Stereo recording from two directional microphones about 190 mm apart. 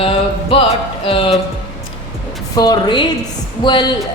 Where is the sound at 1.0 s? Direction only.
30° left (ahead or behind).